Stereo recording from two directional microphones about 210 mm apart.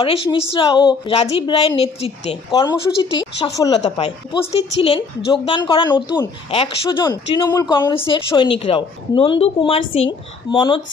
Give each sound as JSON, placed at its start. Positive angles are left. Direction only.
{"t": 0.0, "sound": "a woman's voice", "side_deg": 25}